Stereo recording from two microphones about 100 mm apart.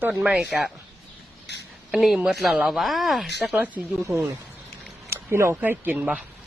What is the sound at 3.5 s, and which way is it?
Speech, 15° right (ahead or behind).